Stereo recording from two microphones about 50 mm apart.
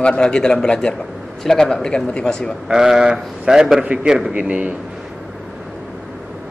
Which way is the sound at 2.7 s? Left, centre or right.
Centre.